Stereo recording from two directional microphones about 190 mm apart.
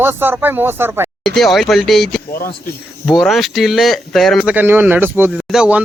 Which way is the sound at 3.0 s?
Centre (ahead or behind).